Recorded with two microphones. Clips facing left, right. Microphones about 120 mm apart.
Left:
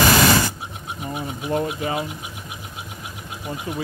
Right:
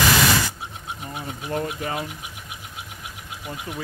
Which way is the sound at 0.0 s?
45° left (ahead or behind).